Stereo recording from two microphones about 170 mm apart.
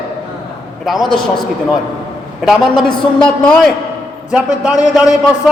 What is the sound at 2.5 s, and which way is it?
A man's voice, 5° left (ahead or behind).